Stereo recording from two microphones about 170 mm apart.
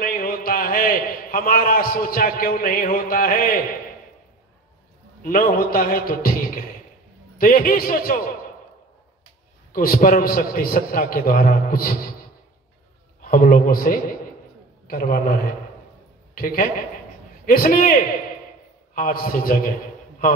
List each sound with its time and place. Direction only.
0.0 s a man's voice: 55° left (ahead or behind)
5.2 s a man's voice: 55° left (ahead or behind)
9.7 s a man's voice: 55° left (ahead or behind)
13.2 s a man's voice: 55° left (ahead or behind)